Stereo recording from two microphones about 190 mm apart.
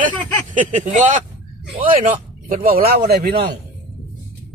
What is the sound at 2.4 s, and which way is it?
Speech, 45° right (ahead or behind).